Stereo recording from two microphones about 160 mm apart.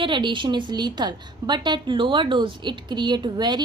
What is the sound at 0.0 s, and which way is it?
A woman's voice, 30° right (ahead or behind).